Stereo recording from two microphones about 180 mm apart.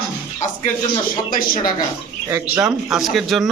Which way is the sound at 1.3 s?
50° left (ahead or behind).